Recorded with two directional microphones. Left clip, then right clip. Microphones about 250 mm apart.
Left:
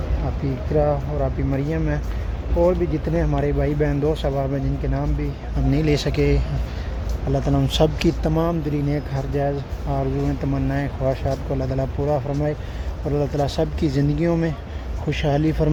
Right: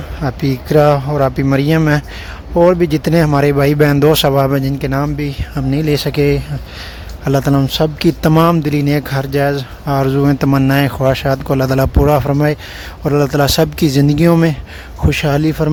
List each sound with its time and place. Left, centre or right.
0.4 s a man's voice: right
5.7 s speech: right
12.0 s a man's voice: right